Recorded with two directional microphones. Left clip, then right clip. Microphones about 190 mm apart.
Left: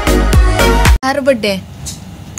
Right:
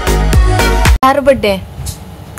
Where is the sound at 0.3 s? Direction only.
Centre (ahead or behind).